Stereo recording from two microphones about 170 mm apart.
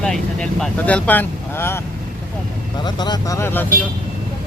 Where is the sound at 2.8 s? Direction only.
25° left (ahead or behind).